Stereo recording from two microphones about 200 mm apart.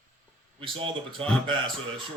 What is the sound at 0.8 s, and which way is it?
Speech, 25° right (ahead or behind).